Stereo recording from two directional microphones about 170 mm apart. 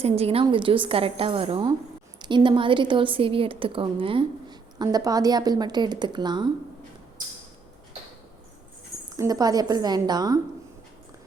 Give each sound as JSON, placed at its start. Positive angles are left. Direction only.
{"t": 0.0, "sound": "a woman's voice", "side_deg": -35}
{"t": 9.1, "sound": "a woman's voice", "side_deg": -20}